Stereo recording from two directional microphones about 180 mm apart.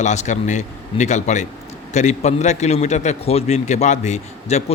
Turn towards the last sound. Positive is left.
turn(degrees=40)  # may be behind; listen again after turning